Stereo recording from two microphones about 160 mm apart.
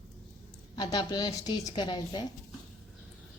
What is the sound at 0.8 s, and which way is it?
A woman's voice, 25° left (ahead or behind).